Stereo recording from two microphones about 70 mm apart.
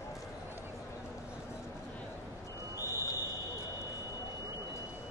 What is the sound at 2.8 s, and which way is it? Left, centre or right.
Fire alarm, right.